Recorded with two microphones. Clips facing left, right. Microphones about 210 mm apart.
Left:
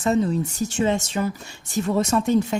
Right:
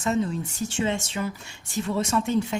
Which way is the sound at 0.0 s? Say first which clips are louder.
Left 5 dB; 35° left (ahead or behind).